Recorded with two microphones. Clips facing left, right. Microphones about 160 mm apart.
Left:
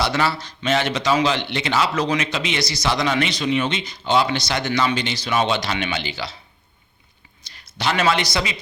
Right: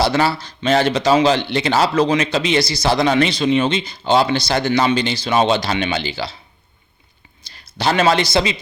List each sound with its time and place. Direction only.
0.0 s speech: 30° right (ahead or behind)
7.4 s a man's voice: 30° right (ahead or behind)